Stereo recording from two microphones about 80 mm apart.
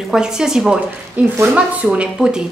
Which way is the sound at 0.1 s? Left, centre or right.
Centre.